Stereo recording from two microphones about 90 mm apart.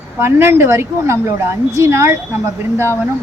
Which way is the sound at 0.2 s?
25° right (ahead or behind).